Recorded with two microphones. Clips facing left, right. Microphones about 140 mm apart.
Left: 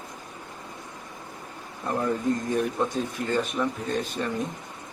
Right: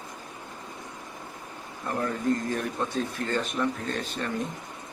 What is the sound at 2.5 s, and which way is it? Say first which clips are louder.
Speech: left 4 dB; 15° left (ahead or behind).